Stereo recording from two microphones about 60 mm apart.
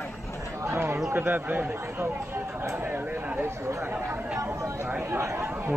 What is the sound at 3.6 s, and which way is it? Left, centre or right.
Speech, right.